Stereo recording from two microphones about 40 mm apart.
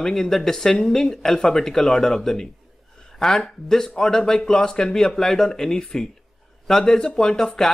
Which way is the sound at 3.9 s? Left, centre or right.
Centre.